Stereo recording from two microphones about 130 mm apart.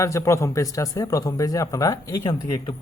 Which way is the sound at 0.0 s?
25° left (ahead or behind).